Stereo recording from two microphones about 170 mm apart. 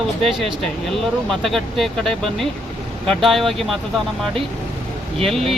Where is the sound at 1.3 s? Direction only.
Centre (ahead or behind).